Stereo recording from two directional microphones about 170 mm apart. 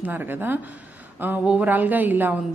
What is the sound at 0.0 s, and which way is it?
A woman's voice, 10° right (ahead or behind).